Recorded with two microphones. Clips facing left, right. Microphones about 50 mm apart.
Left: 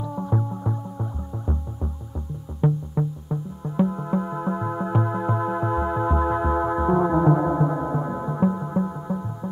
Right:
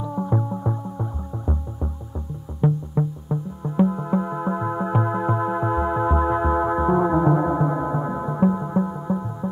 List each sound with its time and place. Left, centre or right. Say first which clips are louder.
0.1 s music: right 3 dB; centre
2.6 s music: right 1 dB; centre